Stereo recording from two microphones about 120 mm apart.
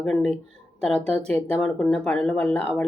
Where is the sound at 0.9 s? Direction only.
60° right (ahead or behind).